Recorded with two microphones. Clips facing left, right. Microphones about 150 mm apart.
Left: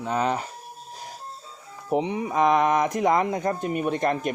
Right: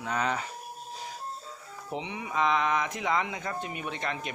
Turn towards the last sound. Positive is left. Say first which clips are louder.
# left 11 dB
turn(degrees=45)  # may be behind; listen again after turning